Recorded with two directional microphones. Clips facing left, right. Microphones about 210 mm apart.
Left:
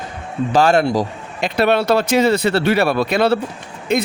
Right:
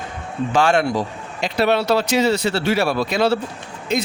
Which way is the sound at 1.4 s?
55° left (ahead or behind).